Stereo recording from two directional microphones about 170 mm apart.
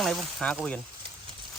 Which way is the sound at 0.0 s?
Centre (ahead or behind).